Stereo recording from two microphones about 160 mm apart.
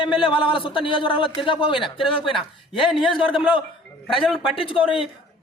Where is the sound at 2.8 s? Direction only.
Centre (ahead or behind).